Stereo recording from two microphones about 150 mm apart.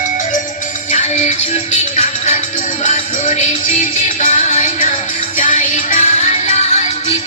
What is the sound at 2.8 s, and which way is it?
Music, 50° left (ahead or behind).